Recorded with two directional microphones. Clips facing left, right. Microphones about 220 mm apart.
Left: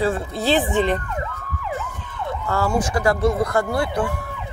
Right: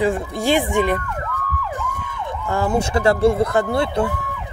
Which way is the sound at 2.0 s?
15° right (ahead or behind).